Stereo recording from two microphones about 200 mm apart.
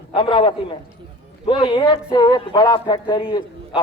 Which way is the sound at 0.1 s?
25° left (ahead or behind).